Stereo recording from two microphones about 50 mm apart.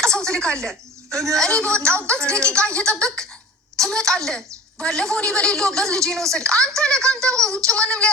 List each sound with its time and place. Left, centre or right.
0.3 s speech: centre
1.5 s a woman's voice: centre